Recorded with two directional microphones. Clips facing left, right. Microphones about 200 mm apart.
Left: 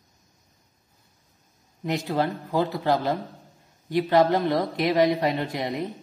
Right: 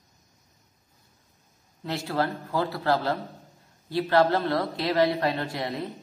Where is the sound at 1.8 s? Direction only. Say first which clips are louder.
Left 3 dB; 15° left (ahead or behind).